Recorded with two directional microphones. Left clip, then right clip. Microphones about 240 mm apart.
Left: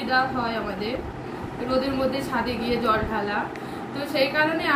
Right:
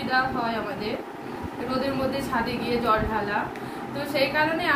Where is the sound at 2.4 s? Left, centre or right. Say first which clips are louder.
Left 1 dB; centre.